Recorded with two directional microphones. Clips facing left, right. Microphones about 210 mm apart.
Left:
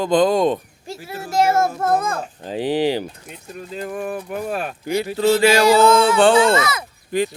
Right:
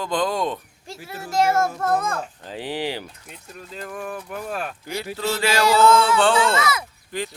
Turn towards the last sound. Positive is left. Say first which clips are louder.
# left 9 dB
turn(degrees=15)  # may be behind; listen again after turning